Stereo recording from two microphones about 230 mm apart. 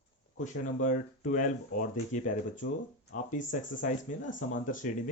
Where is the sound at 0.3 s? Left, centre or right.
Left.